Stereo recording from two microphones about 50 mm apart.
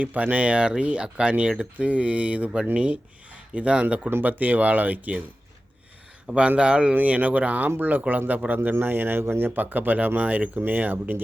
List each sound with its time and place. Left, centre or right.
0.0 s speech: right
4.2 s speech: right
6.2 s speech: right
6.9 s a man's voice: right
9.6 s speech: right